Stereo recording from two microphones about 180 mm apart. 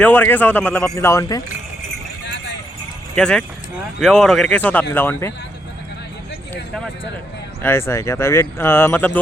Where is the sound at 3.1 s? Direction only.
5° left (ahead or behind).